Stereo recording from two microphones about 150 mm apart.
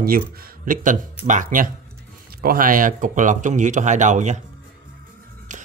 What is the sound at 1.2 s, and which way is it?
Speech, 60° right (ahead or behind).